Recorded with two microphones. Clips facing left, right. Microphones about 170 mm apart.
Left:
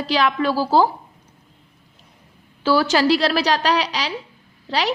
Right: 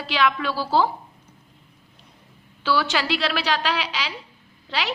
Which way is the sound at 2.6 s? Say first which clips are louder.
Left 7 dB; 40° left (ahead or behind).